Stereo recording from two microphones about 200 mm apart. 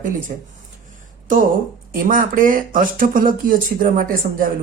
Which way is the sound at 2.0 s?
45° right (ahead or behind).